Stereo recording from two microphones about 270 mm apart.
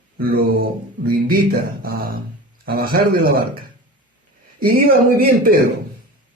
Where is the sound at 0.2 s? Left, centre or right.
Right.